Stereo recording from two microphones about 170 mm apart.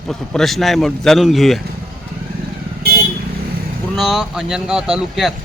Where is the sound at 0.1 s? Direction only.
Centre (ahead or behind).